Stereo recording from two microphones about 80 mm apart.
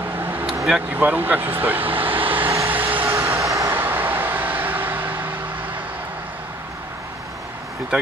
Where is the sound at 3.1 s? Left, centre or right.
Right.